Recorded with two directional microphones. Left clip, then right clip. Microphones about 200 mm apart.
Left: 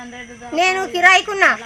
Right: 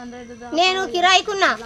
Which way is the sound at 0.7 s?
10° right (ahead or behind).